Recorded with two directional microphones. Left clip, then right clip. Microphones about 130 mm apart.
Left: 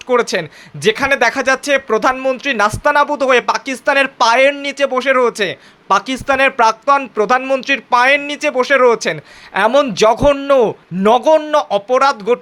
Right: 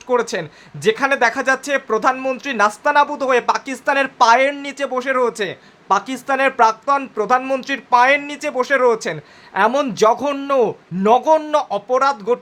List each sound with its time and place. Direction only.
0.1 s speech: 25° left (ahead or behind)